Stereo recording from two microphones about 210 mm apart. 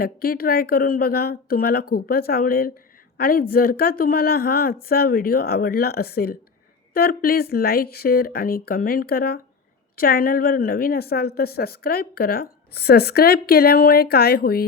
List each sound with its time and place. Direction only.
0.0 s a woman's voice: 45° left (ahead or behind)